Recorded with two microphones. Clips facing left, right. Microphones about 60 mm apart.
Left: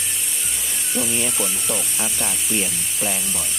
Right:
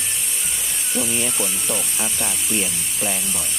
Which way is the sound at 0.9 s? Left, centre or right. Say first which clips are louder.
Even; centre.